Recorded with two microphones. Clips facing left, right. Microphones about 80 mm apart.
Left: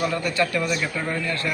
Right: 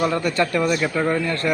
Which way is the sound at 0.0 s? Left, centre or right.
Right.